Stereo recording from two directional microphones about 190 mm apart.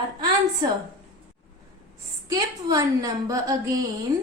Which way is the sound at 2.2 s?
20° right (ahead or behind).